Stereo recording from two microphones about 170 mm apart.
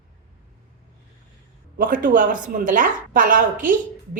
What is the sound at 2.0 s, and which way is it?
A woman's voice, 50° right (ahead or behind).